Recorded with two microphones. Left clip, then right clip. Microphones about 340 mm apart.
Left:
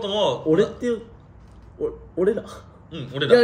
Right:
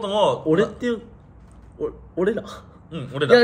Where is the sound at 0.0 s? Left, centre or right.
Centre.